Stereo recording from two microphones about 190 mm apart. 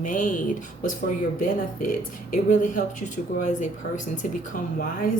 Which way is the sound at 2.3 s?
45° left (ahead or behind).